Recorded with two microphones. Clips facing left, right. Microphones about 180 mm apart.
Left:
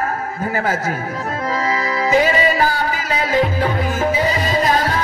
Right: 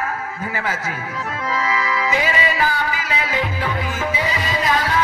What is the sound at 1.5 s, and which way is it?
Music, 40° left (ahead or behind).